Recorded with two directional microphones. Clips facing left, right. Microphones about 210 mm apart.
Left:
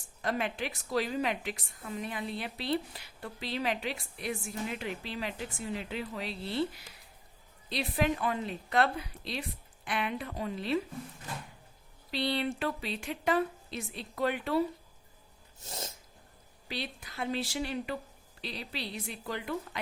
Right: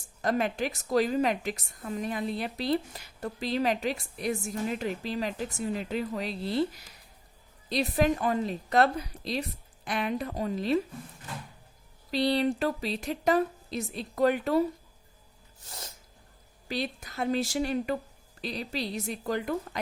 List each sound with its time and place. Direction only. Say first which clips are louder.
0.2 s a woman's voice: right 5 dB; 40° right (ahead or behind)
7.7 s a woman's voice: right 5 dB; 40° right (ahead or behind)
12.1 s a woman's voice: right 6 dB; 40° right (ahead or behind)
16.6 s a woman's voice: right 6 dB; 45° right (ahead or behind)